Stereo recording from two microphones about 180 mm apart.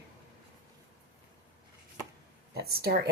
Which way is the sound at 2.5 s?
60° right (ahead or behind).